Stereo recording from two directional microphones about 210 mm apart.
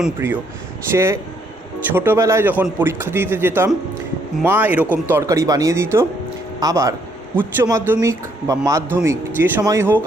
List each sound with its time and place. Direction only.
0.0 s speech: 10° right (ahead or behind)